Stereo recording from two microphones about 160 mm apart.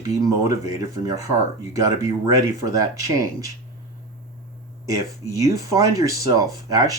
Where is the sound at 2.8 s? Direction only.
20° right (ahead or behind).